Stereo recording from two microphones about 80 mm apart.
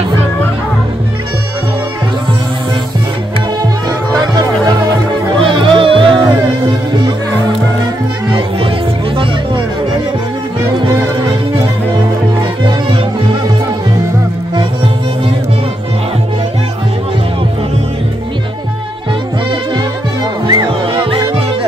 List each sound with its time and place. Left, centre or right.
4.2 s music: right
5.4 s music: right
20.4 s music: right